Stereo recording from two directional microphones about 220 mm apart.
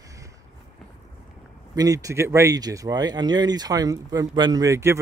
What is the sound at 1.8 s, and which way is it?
Speech, 15° right (ahead or behind).